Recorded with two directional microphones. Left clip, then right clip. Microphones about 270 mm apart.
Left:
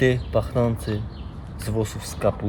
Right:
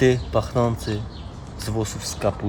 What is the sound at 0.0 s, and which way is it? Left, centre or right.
Speech, centre.